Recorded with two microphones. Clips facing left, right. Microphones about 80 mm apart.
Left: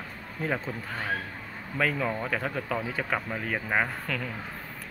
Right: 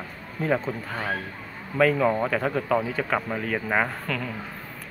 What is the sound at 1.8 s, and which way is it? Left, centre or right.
Speech, centre.